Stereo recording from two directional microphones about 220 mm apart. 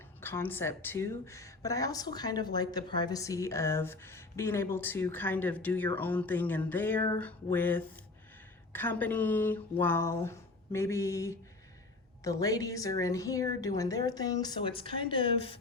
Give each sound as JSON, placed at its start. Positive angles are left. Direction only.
{"t": 0.2, "sound": "speech", "side_deg": 10}